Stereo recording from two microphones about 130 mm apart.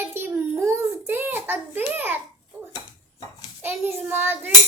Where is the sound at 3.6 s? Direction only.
20° right (ahead or behind).